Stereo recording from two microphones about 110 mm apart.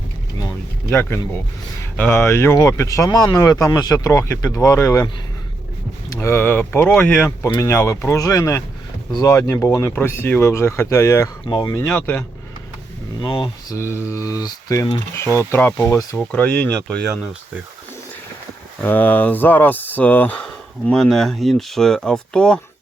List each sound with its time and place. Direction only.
2.0 s speech: 20° left (ahead or behind)
11.4 s speech: 40° left (ahead or behind)
11.8 s speech: 15° left (ahead or behind)
13.2 s speech: 45° left (ahead or behind)
13.7 s speech: 25° left (ahead or behind)
18.8 s speech: 15° left (ahead or behind)
20.9 s speech: 5° left (ahead or behind)